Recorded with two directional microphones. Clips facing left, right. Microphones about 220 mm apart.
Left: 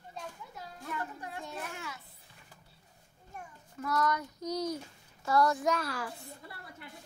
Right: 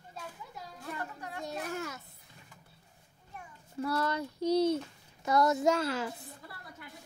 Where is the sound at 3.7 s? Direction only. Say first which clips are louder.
Even; 30° right (ahead or behind).